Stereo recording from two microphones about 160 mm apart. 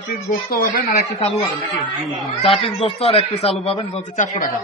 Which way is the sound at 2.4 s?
35° left (ahead or behind).